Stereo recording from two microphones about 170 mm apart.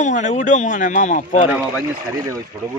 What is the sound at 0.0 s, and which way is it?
Speech, 45° left (ahead or behind).